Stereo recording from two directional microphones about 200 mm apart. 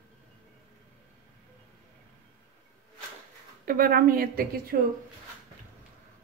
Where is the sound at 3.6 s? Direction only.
45° right (ahead or behind).